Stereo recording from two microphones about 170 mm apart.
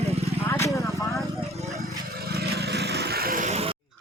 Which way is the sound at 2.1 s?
65° right (ahead or behind).